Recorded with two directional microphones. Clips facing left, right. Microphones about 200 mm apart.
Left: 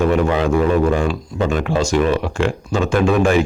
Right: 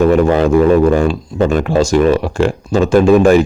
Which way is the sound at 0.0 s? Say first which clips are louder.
Right 6 dB; 40° right (ahead or behind).